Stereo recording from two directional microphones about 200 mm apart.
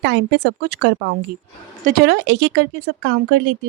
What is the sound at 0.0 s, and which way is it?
Speech, 60° right (ahead or behind).